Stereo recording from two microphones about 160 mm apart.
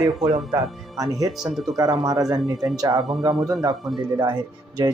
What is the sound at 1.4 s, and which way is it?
Speech, centre (ahead or behind).